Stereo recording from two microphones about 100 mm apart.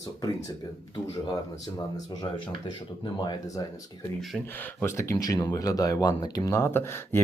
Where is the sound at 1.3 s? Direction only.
40° left (ahead or behind).